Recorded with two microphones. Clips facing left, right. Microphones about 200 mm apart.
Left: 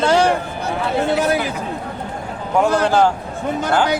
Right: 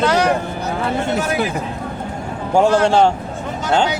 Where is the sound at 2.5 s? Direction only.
30° right (ahead or behind).